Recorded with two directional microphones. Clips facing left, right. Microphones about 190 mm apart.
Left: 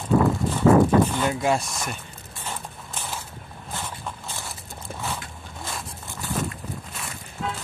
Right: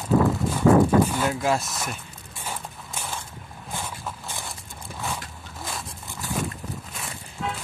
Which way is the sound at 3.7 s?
10° right (ahead or behind).